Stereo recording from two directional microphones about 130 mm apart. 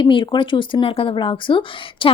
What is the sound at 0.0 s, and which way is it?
Speech, 40° left (ahead or behind).